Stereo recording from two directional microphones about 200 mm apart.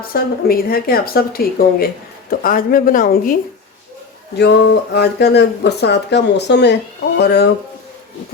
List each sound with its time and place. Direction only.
0.1 s speech: 50° left (ahead or behind)
4.4 s speech: 55° left (ahead or behind)